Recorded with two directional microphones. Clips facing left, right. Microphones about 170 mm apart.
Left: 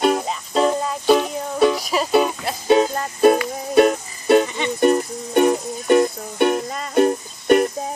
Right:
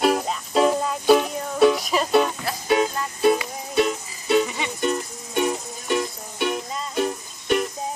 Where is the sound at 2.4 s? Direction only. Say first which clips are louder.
Left 5 dB; 30° left (ahead or behind).